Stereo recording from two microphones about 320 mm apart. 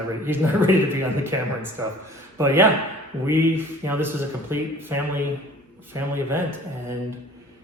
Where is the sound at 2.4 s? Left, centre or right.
Centre.